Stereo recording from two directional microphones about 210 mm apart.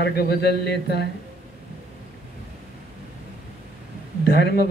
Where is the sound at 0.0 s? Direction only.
50° left (ahead or behind).